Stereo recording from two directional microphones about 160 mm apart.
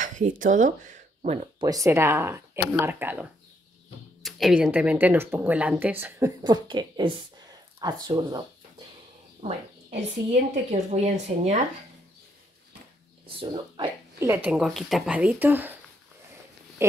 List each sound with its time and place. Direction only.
0.0 s speech: 55° right (ahead or behind)
1.6 s speech: 20° right (ahead or behind)
4.2 s a woman's voice: centre (ahead or behind); by 9.6 s 35° right (ahead or behind)
10.7 s speech: 45° right (ahead or behind)
13.4 s speech: 30° right (ahead or behind)
14.2 s speech: 15° right (ahead or behind)
14.5 s speech: centre (ahead or behind)